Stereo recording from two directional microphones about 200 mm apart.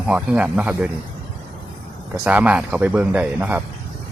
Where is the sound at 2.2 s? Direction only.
5° right (ahead or behind).